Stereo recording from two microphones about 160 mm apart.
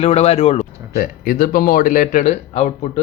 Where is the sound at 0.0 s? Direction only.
40° left (ahead or behind).